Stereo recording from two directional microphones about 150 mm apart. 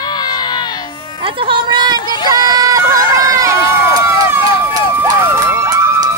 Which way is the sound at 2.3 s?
25° right (ahead or behind).